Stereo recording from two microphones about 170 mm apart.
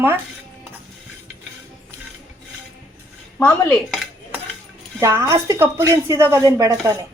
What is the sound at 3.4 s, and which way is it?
Cutlery, 5° left (ahead or behind).